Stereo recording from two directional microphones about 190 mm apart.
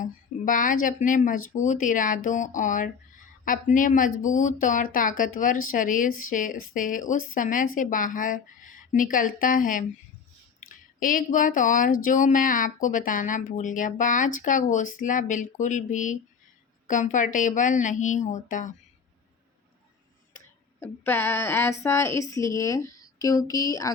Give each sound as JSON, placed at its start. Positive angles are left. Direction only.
{"t": 0.0, "sound": "a woman's voice", "side_deg": 45}
{"t": 20.7, "sound": "speech", "side_deg": 10}